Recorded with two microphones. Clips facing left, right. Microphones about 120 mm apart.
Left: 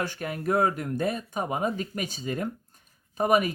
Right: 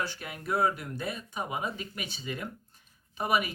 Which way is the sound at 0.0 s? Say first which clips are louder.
Left 6 dB; 50° left (ahead or behind).